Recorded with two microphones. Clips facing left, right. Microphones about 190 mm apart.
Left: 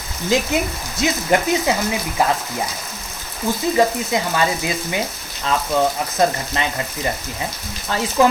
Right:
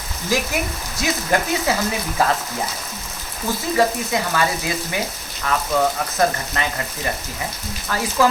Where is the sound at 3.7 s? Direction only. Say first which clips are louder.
Even; 20° left (ahead or behind).